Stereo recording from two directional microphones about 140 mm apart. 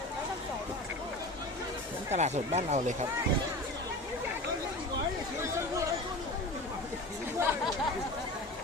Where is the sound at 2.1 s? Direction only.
55° right (ahead or behind).